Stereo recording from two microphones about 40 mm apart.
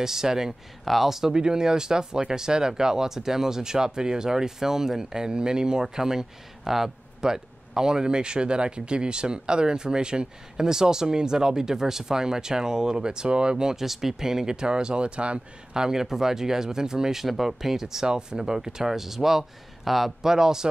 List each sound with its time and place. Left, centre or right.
0.0 s speech: centre; by 15.4 s right
15.7 s speech: centre
17.2 s speech: centre